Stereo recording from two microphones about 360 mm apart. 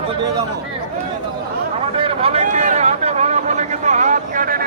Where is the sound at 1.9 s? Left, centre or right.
Centre.